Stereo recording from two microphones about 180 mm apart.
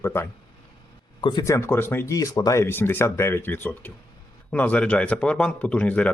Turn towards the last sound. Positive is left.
turn(degrees=5)  # may be behind; listen again after turning